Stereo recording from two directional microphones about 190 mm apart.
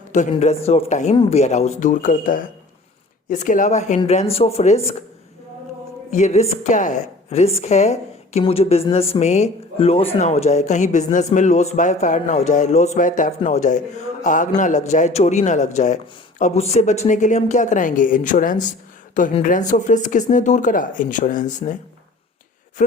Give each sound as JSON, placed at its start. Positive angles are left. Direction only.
{"t": 0.1, "sound": "a woman's voice", "side_deg": 35}
{"t": 6.1, "sound": "a woman's voice", "side_deg": 40}
{"t": 22.8, "sound": "a man's voice", "side_deg": 40}